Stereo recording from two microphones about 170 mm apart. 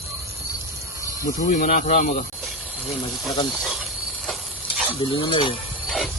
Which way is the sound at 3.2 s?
Centre (ahead or behind).